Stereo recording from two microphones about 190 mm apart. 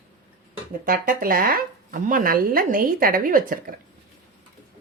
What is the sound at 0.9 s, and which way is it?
Speech, 50° right (ahead or behind).